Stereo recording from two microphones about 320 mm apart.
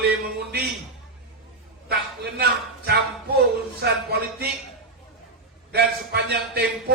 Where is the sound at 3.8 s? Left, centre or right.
Right.